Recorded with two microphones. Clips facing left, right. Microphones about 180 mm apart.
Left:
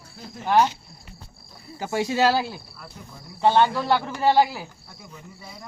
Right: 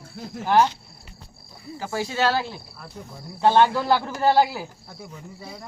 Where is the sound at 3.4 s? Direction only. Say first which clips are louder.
Right 1 dB; centre (ahead or behind).